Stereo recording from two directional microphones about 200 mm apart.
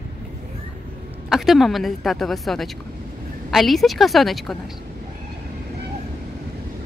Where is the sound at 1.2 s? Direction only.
Centre (ahead or behind).